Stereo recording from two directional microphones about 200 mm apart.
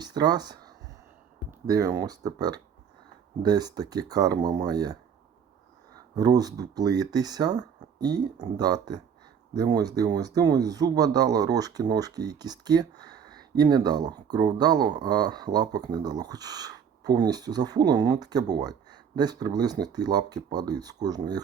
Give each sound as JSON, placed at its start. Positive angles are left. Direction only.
{"t": 0.0, "sound": "a sound", "side_deg": -20}
{"t": 1.6, "sound": "speech", "side_deg": -15}
{"t": 6.1, "sound": "speech", "side_deg": -20}